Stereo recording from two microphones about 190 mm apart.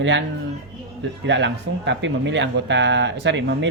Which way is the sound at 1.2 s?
70° right (ahead or behind).